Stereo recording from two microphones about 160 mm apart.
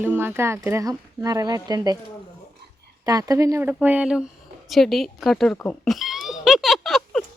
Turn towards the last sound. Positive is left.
turn(degrees=0)  # may be behind; listen again after turning